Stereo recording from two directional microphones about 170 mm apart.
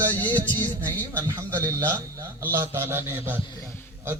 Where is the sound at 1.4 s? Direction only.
15° right (ahead or behind).